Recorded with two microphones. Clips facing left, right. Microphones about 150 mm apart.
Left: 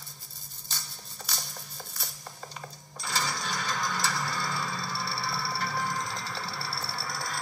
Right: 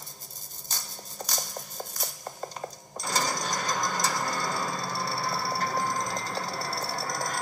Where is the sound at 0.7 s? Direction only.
40° right (ahead or behind).